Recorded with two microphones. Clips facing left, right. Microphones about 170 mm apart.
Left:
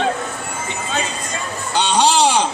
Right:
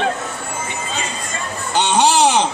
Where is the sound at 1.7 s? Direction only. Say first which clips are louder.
Right 1 dB; 20° right (ahead or behind).